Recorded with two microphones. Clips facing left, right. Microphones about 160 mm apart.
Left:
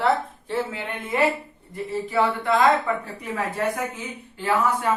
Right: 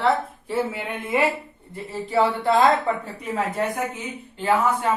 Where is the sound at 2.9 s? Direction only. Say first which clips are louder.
Right 1 dB; 30° right (ahead or behind).